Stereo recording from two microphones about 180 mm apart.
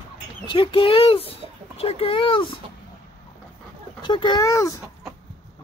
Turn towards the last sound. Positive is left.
turn(degrees=20)  # may be behind; listen again after turning